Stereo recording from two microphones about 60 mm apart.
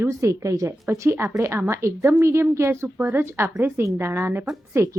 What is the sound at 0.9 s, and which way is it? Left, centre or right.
A woman's voice, right.